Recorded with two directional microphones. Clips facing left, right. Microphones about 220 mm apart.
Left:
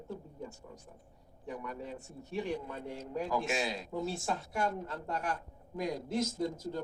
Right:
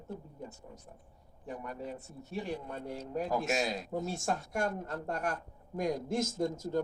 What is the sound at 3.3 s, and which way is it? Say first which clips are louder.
Speech: right 2 dB; 40° right (ahead or behind).